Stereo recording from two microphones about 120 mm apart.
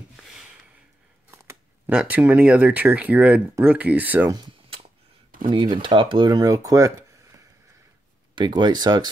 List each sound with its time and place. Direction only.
1.3 s a sound: 25° right (ahead or behind)
1.9 s speech: 10° right (ahead or behind)
4.3 s speech: 35° right (ahead or behind)